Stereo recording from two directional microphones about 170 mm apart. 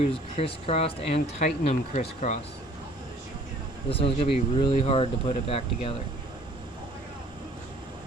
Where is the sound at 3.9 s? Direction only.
35° left (ahead or behind).